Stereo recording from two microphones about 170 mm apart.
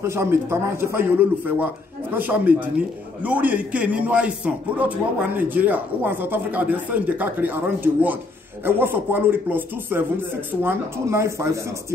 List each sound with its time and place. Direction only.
0.0 s a man's voice: 15° right (ahead or behind)